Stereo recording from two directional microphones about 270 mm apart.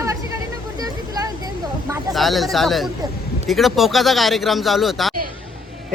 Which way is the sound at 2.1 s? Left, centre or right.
Centre.